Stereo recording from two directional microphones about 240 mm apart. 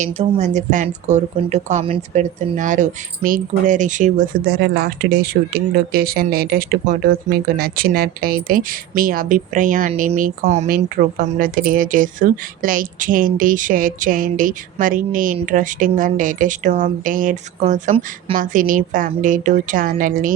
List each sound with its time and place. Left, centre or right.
0.0 s a woman's voice: right